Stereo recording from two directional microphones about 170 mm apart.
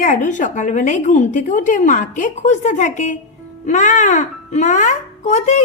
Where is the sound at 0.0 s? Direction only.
50° left (ahead or behind).